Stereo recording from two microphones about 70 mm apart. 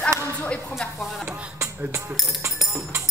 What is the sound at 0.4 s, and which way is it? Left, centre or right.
Speech, left.